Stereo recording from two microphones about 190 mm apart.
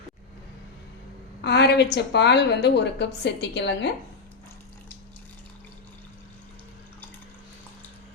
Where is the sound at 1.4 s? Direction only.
65° left (ahead or behind).